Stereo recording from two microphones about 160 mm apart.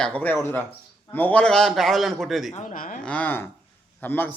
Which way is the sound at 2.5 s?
50° left (ahead or behind).